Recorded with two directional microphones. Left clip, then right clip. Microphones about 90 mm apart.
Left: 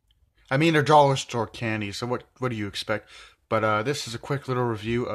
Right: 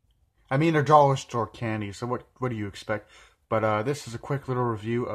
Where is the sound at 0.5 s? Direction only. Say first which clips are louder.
Left 1 dB; 25° left (ahead or behind).